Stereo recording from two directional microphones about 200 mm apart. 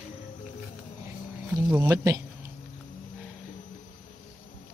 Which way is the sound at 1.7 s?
15° right (ahead or behind).